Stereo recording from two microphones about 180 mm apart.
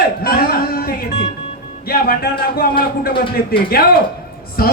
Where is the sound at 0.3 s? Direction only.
55° left (ahead or behind).